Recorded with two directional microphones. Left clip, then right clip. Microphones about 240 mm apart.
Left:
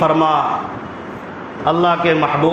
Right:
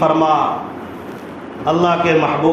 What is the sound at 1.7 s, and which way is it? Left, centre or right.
Speech, left.